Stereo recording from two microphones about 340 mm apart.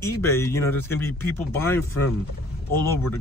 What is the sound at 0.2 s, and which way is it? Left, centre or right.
Speech, centre.